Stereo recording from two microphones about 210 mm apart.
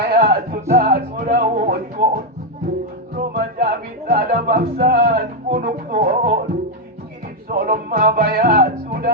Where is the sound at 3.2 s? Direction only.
45° right (ahead or behind).